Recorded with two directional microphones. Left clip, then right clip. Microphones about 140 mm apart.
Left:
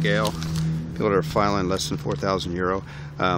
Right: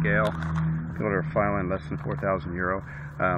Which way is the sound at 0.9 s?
55° left (ahead or behind).